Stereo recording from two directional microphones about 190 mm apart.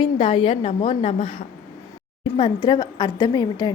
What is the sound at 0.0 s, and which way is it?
A woman's voice, 30° left (ahead or behind).